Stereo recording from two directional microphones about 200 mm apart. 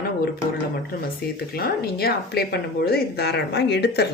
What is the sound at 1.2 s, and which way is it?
Speech, 50° left (ahead or behind).